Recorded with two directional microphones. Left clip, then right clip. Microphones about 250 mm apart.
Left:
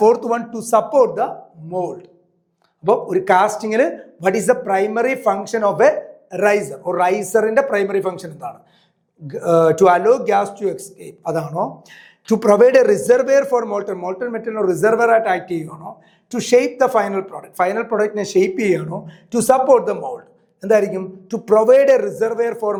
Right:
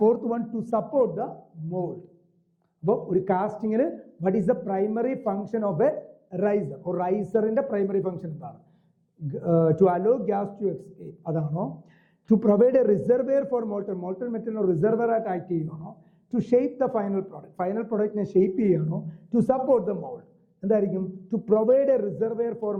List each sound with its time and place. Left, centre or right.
0.3 s a man's voice: centre
3.1 s a man's voice: centre
11.5 s speech: left
11.9 s a man's voice: centre
16.3 s a man's voice: centre
19.5 s a man's voice: centre